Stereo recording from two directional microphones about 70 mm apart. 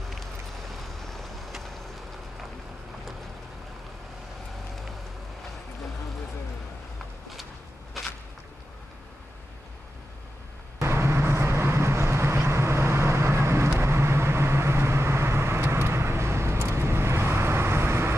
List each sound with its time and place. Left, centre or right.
0.1 s vehicle: centre
10.8 s vehicle: right